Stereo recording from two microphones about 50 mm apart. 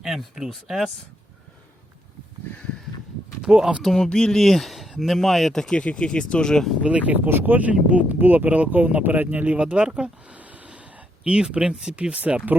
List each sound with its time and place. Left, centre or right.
0.0 s speech: centre
3.4 s speech: centre
3.8 s speech: centre
4.4 s speech: centre
5.8 s speech: left
6.8 s speech: right
7.3 s speech: right
8.2 s speech: right
10.7 s a sound: right
11.2 s speech: centre